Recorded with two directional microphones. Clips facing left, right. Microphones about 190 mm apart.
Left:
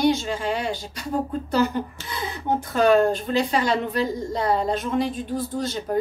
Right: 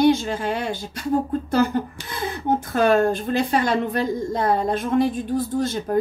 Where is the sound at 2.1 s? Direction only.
50° right (ahead or behind).